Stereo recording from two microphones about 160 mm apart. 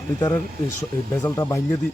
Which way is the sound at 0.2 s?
20° left (ahead or behind).